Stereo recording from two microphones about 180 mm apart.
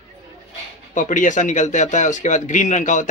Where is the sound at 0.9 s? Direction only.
45° left (ahead or behind).